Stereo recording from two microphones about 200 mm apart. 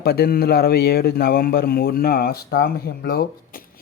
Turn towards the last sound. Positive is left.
turn(degrees=45)  # may be behind; listen again after turning